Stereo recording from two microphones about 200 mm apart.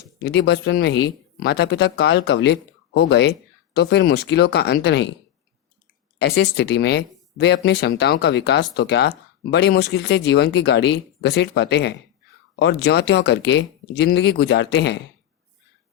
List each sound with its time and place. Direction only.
0.2 s speech: 60° left (ahead or behind)
6.1 s speech: 55° left (ahead or behind)